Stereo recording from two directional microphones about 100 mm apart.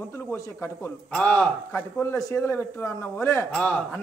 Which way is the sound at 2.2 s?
30° left (ahead or behind).